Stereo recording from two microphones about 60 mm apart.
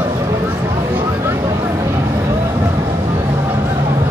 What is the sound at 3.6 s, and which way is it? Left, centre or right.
Music, right.